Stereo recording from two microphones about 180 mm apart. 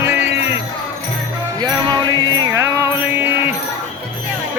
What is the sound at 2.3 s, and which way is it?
Music, 20° right (ahead or behind).